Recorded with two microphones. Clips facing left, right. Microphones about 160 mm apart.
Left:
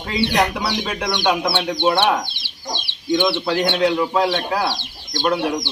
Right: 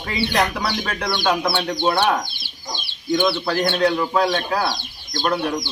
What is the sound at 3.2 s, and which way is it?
Speech, 20° left (ahead or behind).